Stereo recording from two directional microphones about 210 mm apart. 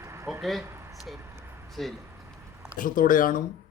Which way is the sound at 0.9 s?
Centre (ahead or behind).